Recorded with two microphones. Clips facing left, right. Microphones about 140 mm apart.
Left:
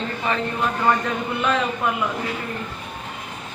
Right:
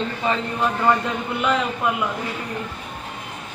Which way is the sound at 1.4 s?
15° right (ahead or behind).